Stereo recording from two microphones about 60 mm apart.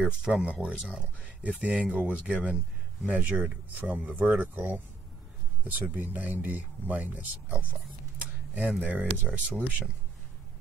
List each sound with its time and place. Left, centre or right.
0.0 s speech: centre
8.7 s speech: right